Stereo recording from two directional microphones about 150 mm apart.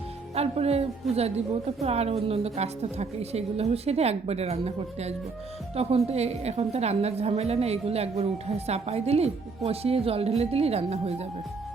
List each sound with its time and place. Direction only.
0.3 s a woman's voice: 45° right (ahead or behind)